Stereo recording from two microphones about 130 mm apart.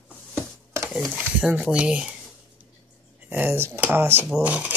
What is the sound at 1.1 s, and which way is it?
Speech, 10° right (ahead or behind).